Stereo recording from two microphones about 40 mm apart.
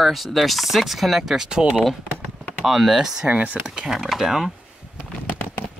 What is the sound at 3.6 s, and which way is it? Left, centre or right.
Speech, centre.